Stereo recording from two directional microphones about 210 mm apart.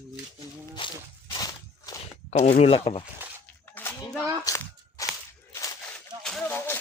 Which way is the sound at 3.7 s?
10° left (ahead or behind).